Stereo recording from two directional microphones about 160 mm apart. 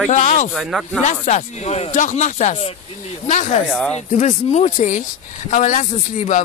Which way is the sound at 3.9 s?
45° left (ahead or behind).